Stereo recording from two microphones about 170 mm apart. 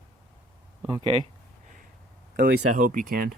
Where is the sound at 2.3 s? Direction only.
55° right (ahead or behind).